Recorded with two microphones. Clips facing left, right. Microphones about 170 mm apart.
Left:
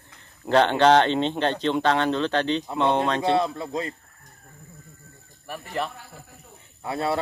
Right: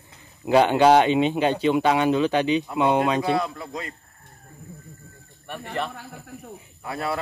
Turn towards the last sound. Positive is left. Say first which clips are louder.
# left 3 dB
turn(degrees=25)  # may be behind; listen again after turning